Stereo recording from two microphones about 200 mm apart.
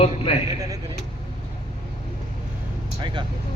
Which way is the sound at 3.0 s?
25° right (ahead or behind).